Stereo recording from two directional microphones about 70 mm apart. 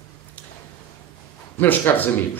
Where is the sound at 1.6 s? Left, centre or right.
Left.